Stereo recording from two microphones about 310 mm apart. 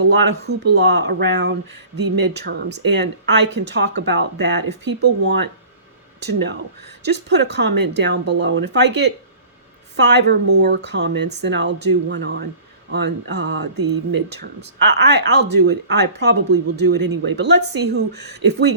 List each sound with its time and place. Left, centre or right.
0.0 s speech: right